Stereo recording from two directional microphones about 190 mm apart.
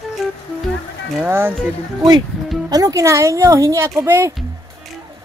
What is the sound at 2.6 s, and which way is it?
Speech, 20° right (ahead or behind).